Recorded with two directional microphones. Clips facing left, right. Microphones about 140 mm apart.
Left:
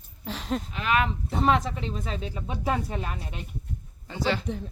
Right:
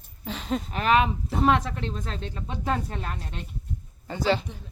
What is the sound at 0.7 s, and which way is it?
Speech, 40° right (ahead or behind).